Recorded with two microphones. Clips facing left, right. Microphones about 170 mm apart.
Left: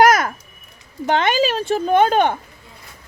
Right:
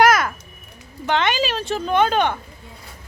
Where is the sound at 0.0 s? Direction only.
50° left (ahead or behind).